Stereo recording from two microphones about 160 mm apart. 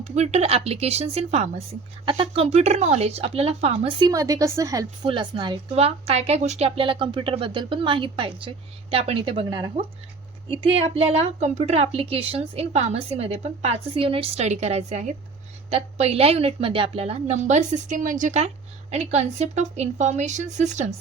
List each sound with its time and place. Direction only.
0.0 s a woman's voice: 45° right (ahead or behind)